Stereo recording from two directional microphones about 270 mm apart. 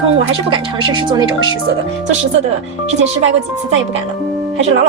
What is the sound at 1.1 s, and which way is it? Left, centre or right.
Speech, centre.